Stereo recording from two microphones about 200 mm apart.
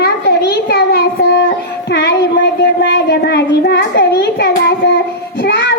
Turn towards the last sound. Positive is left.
turn(degrees=60)  # may be behind; listen again after turning